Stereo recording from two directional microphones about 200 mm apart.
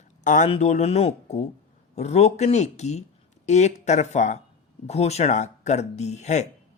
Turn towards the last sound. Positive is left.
turn(degrees=35)  # may be behind; listen again after turning